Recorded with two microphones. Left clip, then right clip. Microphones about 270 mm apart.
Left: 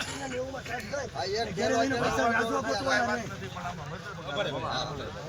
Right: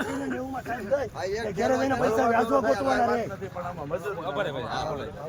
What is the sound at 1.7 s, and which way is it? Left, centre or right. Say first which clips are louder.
Speech: right 2 dB; centre.